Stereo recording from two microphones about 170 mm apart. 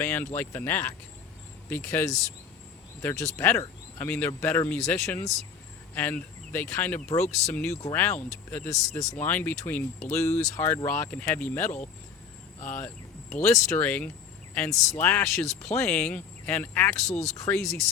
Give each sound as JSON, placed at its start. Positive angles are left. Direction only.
{"t": 0.0, "sound": "speech", "side_deg": 10}
{"t": 8.4, "sound": "speech", "side_deg": 10}
{"t": 17.1, "sound": "speech", "side_deg": 40}
{"t": 17.3, "sound": "speech", "side_deg": 20}